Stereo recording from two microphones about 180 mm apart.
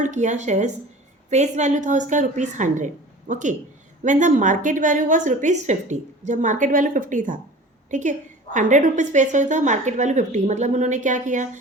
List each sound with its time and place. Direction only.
0.0 s a woman's voice: 40° right (ahead or behind)